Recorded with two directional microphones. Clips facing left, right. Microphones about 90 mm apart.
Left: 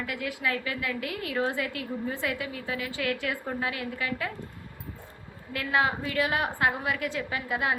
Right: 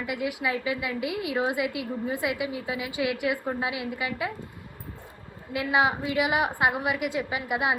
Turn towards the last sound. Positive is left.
turn(degrees=-15)  # may be behind; listen again after turning